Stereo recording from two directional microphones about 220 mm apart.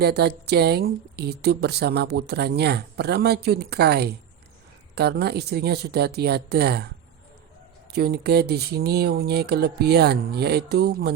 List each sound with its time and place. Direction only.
0.0 s speech: 45° right (ahead or behind)
7.9 s speech: 45° right (ahead or behind)